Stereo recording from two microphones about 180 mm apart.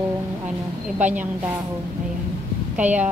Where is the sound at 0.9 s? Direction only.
10° right (ahead or behind).